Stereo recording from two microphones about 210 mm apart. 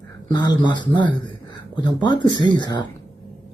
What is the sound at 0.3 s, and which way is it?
Speech, 20° left (ahead or behind).